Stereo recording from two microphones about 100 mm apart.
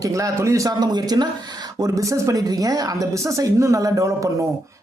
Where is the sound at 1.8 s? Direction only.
35° right (ahead or behind).